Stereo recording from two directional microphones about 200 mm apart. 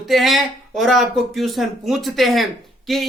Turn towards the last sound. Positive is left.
turn(degrees=0)  # may be behind; listen again after turning